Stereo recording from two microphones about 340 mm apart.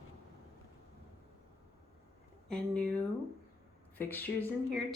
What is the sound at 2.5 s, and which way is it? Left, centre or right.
Speech, centre.